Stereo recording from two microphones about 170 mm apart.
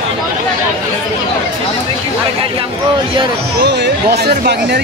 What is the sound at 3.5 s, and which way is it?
Speech, 80° right.